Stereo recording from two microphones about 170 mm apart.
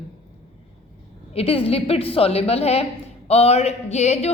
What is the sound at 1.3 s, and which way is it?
A woman's voice, 35° left (ahead or behind).